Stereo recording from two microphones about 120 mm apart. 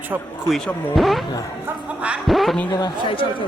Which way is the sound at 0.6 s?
Centre (ahead or behind).